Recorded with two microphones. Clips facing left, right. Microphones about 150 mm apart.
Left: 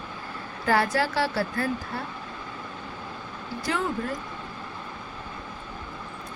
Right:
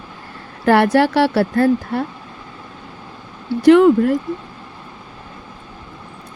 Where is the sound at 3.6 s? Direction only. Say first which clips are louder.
Right 19 dB; 70° right (ahead or behind).